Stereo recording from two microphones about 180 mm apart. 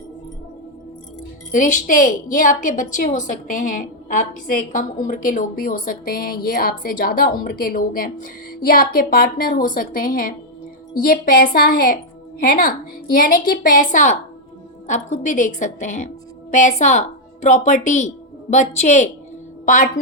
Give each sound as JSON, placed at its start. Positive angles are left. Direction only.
{"t": 1.5, "sound": "a woman's voice", "side_deg": 45}